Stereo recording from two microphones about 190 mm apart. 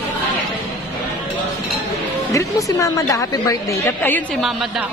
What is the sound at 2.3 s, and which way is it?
A woman's voice, 15° left (ahead or behind).